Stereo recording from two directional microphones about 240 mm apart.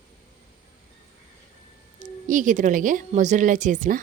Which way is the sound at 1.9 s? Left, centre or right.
Right.